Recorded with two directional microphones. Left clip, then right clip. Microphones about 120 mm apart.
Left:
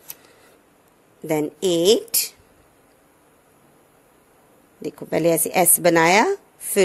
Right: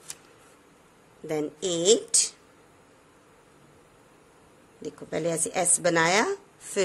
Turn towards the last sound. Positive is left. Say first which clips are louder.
# left 8 dB
turn(degrees=60)  # may be behind; listen again after turning